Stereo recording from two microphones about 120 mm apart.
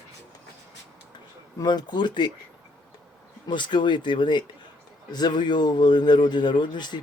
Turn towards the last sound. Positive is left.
turn(degrees=40)  # may be behind; listen again after turning